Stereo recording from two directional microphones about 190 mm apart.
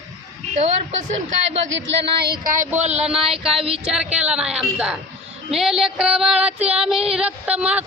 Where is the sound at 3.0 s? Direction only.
Centre (ahead or behind).